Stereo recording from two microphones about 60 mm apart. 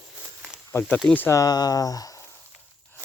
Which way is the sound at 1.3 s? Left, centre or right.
Left.